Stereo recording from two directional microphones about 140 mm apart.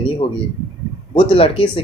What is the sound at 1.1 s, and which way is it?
Speech, 40° left (ahead or behind).